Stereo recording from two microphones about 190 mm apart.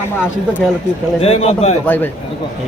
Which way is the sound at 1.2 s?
30° left (ahead or behind).